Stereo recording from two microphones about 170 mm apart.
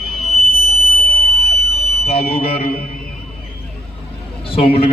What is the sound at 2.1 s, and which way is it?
Speech, 35° left (ahead or behind).